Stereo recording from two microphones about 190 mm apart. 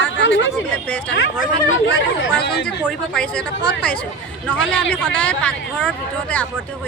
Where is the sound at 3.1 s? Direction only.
5° left (ahead or behind).